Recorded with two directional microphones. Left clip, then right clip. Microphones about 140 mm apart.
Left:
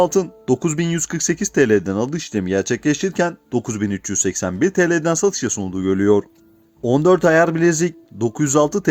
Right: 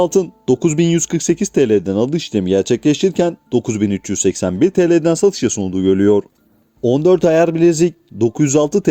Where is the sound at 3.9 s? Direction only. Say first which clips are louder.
Right 2 dB; 60° right (ahead or behind).